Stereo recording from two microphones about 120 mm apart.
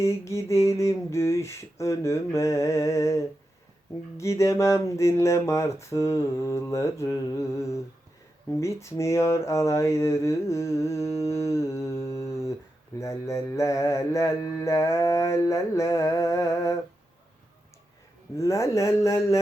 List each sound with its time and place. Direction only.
0.0 s mantra: 25° left (ahead or behind)
18.3 s mantra: 25° left (ahead or behind)